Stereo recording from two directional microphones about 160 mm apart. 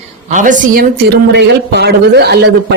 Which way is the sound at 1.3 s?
90° right.